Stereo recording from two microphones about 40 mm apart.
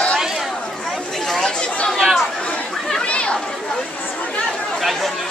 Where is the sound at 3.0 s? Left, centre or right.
Left.